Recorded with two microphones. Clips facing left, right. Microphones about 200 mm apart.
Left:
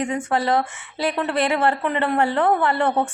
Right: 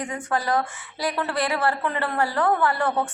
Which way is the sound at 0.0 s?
25° left (ahead or behind).